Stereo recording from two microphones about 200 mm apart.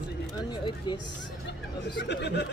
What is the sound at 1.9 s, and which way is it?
Speech, 55° left (ahead or behind).